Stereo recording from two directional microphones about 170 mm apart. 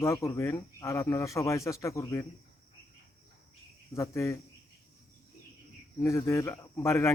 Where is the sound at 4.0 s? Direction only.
15° left (ahead or behind).